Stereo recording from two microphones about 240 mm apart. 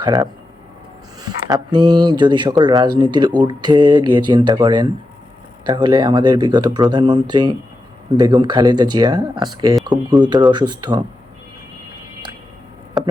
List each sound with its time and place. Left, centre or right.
0.0 s speech: centre